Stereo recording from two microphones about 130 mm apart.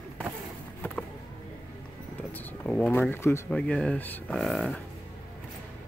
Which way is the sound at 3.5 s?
5° left (ahead or behind).